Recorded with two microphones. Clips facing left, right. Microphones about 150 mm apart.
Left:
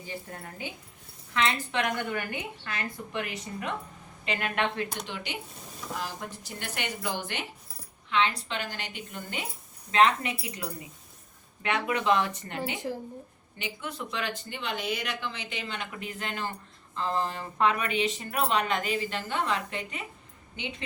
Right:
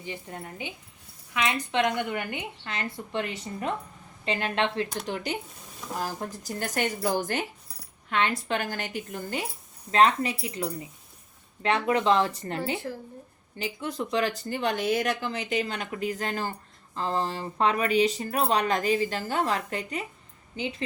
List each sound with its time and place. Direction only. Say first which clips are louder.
0.0 s a woman's voice: right 2 dB; 20° right (ahead or behind)
5.0 s a woman's voice: right 6 dB; 40° right (ahead or behind)
12.7 s speech: right 1 dB; 15° left (ahead or behind)
13.6 s speech: right 5 dB; 35° right (ahead or behind)